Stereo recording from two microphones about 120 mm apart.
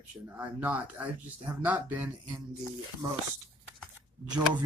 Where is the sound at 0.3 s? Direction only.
15° right (ahead or behind).